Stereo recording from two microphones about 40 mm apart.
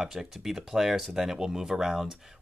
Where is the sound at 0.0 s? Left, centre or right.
Centre.